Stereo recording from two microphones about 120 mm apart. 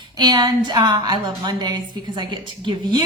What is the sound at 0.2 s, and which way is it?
A woman's voice, 35° right (ahead or behind).